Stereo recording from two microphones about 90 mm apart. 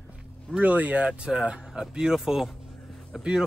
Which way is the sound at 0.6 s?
15° right (ahead or behind).